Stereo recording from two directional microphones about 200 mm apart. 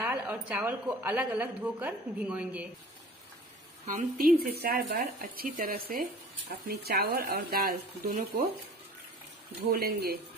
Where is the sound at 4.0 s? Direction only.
45° right (ahead or behind).